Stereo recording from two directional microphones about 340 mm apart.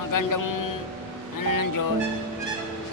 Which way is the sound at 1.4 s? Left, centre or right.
Left.